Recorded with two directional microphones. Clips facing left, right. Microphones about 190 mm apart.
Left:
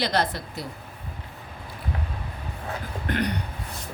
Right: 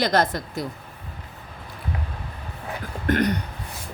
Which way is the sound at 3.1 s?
45° right (ahead or behind).